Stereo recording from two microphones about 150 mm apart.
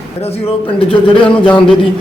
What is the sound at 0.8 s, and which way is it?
Speech, 35° left (ahead or behind).